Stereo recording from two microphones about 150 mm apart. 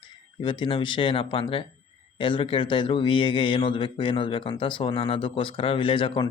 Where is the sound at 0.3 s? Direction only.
35° left (ahead or behind).